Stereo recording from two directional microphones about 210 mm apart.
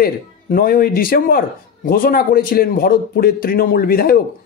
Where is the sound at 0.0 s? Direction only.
45° left (ahead or behind).